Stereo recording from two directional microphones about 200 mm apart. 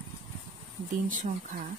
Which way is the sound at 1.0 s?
40° right (ahead or behind).